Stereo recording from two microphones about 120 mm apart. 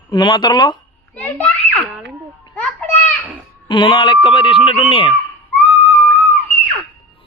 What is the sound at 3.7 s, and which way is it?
Speech, 40° left (ahead or behind).